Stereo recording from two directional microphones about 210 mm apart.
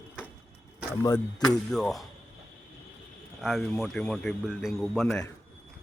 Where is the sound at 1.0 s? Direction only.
15° left (ahead or behind).